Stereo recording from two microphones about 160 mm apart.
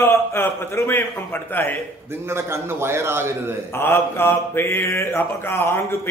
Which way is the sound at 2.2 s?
15° right (ahead or behind).